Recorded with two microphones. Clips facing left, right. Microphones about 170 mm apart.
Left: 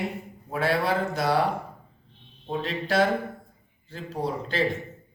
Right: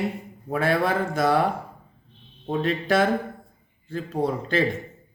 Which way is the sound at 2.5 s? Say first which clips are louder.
Right 6 dB; 55° right (ahead or behind).